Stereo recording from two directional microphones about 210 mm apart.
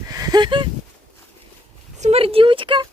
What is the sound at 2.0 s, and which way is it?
Speech, 30° right (ahead or behind).